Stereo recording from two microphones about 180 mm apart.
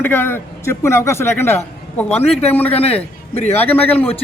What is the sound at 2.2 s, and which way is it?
A man's voice, 35° left (ahead or behind).